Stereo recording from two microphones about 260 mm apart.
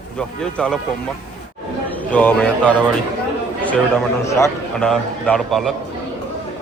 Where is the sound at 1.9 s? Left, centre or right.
Centre.